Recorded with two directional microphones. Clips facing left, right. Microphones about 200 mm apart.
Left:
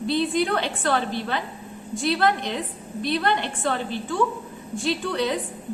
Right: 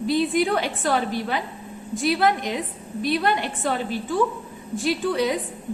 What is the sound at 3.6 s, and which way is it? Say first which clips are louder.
A woman's voice: right 1 dB; 15° right (ahead or behind).